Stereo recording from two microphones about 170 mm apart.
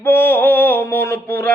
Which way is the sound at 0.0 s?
15° left (ahead or behind).